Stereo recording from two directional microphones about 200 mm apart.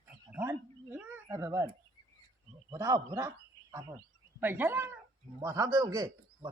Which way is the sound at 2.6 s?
15° right (ahead or behind).